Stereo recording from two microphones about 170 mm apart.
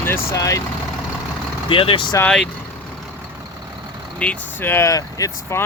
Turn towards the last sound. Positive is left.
turn(degrees=20)  # may be behind; listen again after turning